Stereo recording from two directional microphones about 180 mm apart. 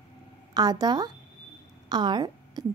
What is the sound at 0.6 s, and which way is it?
A woman's voice, 20° right (ahead or behind).